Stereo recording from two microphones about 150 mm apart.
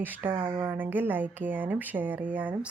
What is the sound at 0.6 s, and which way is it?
Speech, 15° right (ahead or behind).